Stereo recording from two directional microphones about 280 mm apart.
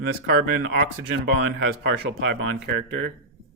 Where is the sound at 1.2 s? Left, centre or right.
Right.